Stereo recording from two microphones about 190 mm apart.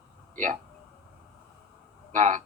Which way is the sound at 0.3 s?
40° right (ahead or behind).